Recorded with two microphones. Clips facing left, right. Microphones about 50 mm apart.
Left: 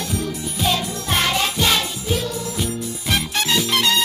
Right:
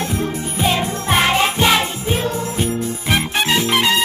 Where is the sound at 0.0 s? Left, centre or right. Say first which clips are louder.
Right 4 dB; right.